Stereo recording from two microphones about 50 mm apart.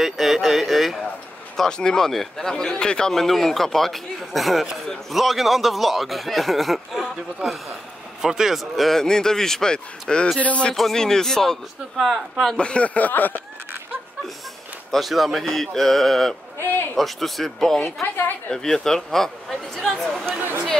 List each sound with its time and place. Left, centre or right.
0.0 s speech: centre
1.6 s a man's voice: centre
8.2 s speech: centre
8.8 s a man's voice: centre
10.8 s a man's voice: centre
12.5 s speech: left
14.9 s a man's voice: centre